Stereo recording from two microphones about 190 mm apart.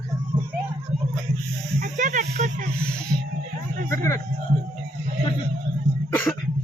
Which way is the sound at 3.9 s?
15° left (ahead or behind).